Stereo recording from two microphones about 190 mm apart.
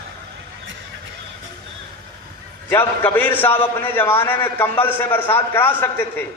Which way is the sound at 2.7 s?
10° left (ahead or behind).